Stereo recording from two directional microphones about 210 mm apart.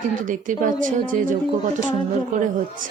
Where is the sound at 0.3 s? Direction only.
40° right (ahead or behind).